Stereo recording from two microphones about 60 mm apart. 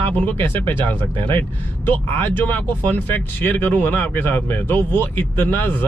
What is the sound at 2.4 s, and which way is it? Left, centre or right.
Speech, left.